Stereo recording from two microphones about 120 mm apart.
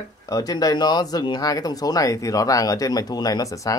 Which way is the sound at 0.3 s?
30° left (ahead or behind).